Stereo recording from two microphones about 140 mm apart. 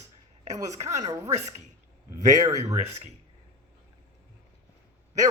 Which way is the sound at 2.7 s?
50° right (ahead or behind).